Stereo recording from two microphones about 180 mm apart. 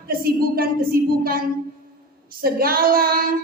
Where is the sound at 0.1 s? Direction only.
55° right (ahead or behind).